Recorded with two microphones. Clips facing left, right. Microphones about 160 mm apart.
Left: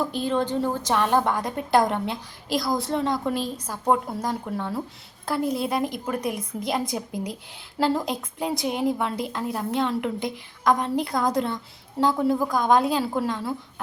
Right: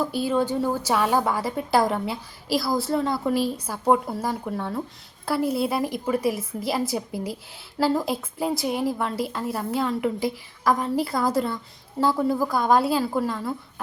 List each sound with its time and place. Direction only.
0.0 s a woman's voice: 5° right (ahead or behind)